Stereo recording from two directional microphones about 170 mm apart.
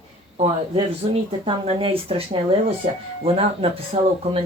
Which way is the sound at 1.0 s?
30° right (ahead or behind).